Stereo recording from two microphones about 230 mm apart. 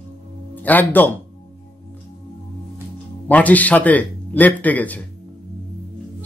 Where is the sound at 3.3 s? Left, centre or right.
Centre.